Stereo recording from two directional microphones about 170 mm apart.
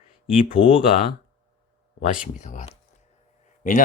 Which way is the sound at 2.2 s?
50° left (ahead or behind).